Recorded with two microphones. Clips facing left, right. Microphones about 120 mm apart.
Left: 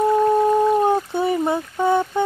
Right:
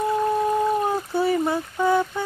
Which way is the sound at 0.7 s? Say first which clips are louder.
Left 4 dB; 25° left (ahead or behind).